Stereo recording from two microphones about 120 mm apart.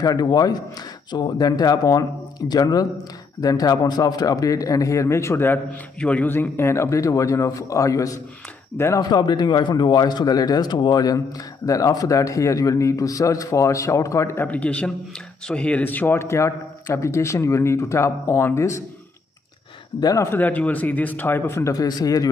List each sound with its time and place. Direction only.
0.0 s speech: 35° left (ahead or behind)
9.1 s speech: 35° left (ahead or behind)
20.0 s speech: 25° left (ahead or behind)